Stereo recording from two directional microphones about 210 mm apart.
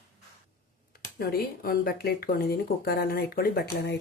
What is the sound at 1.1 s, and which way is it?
Speech, 45° left (ahead or behind).